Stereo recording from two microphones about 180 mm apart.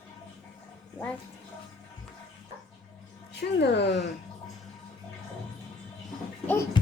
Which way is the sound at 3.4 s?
70° left (ahead or behind).